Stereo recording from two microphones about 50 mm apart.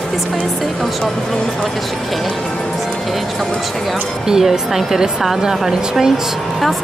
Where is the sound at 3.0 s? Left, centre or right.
Centre.